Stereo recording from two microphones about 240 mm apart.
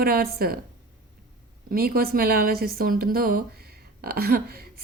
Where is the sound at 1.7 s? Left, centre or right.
Right.